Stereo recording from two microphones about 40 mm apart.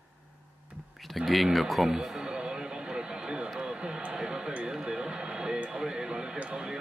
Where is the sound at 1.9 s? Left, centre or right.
Centre.